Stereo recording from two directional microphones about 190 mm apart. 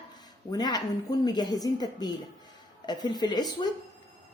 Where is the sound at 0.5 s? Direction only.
20° left (ahead or behind).